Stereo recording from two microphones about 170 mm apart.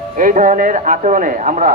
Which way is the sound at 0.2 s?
50° right (ahead or behind).